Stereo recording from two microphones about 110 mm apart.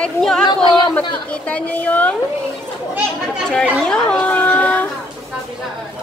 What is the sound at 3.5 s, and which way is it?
Speech, 10° left (ahead or behind).